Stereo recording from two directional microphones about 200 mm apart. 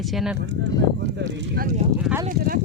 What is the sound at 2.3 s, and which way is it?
Speech, 45° right (ahead or behind).